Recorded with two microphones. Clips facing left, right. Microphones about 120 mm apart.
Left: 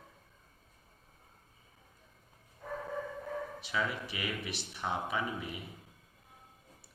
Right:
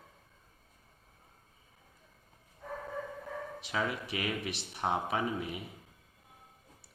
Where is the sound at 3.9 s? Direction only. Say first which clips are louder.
Right 3 dB; 55° right (ahead or behind).